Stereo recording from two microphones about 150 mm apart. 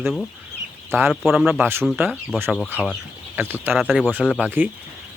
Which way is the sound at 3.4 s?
15° right (ahead or behind).